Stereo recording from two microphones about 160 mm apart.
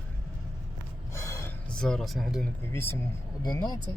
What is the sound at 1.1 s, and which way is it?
Gasp, 20° left (ahead or behind).